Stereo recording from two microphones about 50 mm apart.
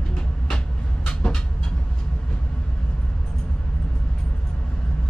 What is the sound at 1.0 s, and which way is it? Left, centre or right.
Vehicle, left.